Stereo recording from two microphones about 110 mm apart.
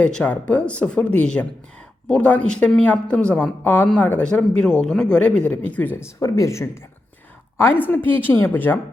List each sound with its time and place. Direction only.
0.0 s speech: 10° left (ahead or behind)